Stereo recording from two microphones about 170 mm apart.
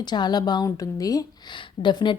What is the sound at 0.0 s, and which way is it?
A woman's voice, 25° left (ahead or behind).